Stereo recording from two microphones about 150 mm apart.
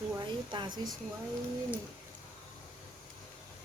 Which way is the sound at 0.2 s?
30° right (ahead or behind).